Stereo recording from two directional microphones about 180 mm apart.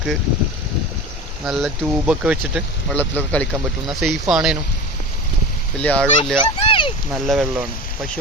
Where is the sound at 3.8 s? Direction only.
Centre (ahead or behind).